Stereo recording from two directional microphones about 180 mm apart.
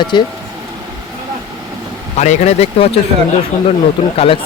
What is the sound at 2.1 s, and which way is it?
Speech, 40° left (ahead or behind).